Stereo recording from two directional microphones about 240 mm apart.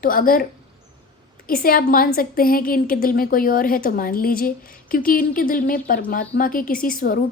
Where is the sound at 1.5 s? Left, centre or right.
Left.